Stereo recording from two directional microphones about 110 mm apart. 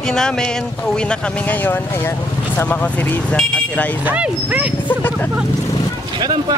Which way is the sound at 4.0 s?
15° right (ahead or behind).